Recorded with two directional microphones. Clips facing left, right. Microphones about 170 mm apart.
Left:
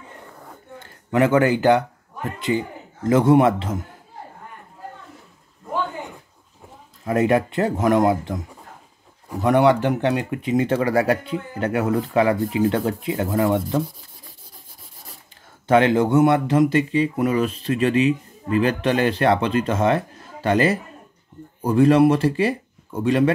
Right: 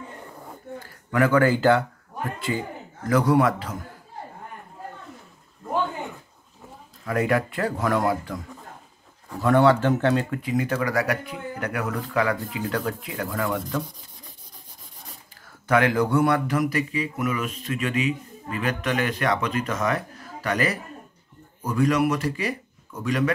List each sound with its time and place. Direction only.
0.7 s speech: 20° left (ahead or behind)
7.1 s speech: 25° left (ahead or behind)
15.6 s speech: 25° left (ahead or behind)